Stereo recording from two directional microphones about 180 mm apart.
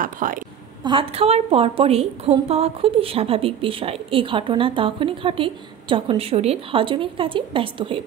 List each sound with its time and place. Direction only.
0.0 s a woman's voice: 50° right (ahead or behind)
0.8 s a woman's voice: 30° right (ahead or behind)